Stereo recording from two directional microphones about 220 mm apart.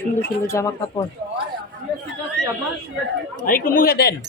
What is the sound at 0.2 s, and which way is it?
Speech, 15° left (ahead or behind).